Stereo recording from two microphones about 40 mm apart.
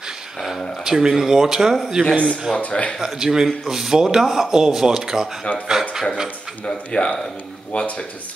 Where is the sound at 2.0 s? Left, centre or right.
Right.